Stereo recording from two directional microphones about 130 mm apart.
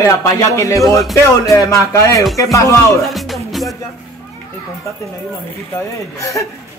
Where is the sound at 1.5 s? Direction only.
25° left (ahead or behind).